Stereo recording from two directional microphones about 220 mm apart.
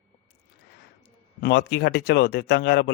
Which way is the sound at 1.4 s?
50° left (ahead or behind).